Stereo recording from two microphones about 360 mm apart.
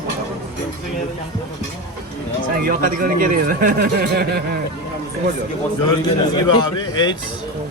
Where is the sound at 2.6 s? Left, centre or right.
Right.